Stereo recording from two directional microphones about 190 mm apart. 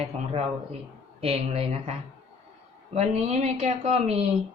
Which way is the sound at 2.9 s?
35° right (ahead or behind).